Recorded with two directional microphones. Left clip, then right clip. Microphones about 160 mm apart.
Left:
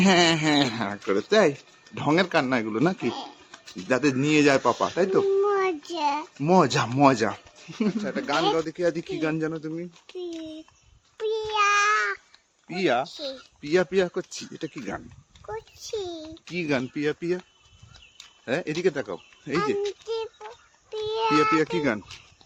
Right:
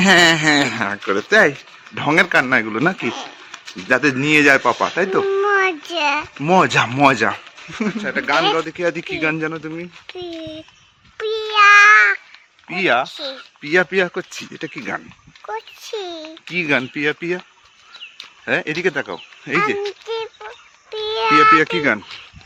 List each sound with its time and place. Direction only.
0.0 s speech: 5° right (ahead or behind)
4.7 s speech: 10° right (ahead or behind)
5.5 s a sound: 20° left (ahead or behind)
6.4 s speech: centre (ahead or behind)
11.2 s a sound: 15° left (ahead or behind)
12.6 s a child's voice: centre (ahead or behind)
16.0 s babbling: 15° left (ahead or behind)
16.3 s speech: centre (ahead or behind)
20.9 s a sound: 10° left (ahead or behind)
21.5 s speech: 5° right (ahead or behind)